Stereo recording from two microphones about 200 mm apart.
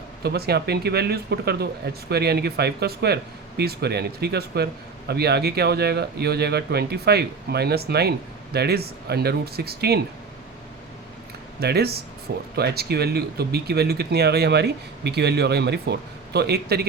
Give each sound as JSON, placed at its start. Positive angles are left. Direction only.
{"t": 0.2, "sound": "a man's voice", "side_deg": -55}
{"t": 11.6, "sound": "a man's voice", "side_deg": -55}